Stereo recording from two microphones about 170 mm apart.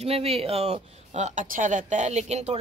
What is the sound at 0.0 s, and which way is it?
Speech, 35° right (ahead or behind).